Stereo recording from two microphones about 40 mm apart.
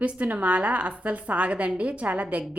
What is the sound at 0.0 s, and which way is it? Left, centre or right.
A woman's voice, right.